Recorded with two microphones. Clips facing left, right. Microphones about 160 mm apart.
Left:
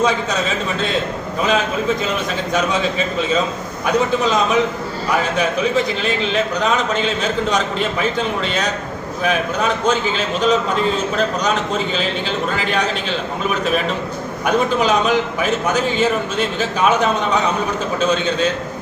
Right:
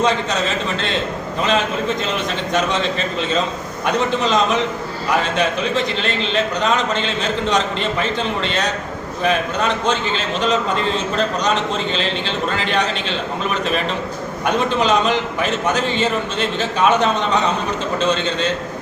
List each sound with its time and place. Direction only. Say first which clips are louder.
1.5 s a man's voice: left 1 dB; 5° left (ahead or behind)